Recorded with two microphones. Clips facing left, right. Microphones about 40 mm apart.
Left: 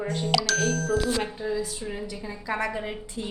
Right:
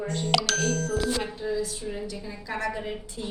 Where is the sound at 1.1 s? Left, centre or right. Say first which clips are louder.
Left 1 dB; centre.